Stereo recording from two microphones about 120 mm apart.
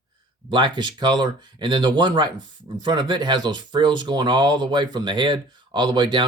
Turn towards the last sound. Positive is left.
turn(degrees=-40)  # may be behind; listen again after turning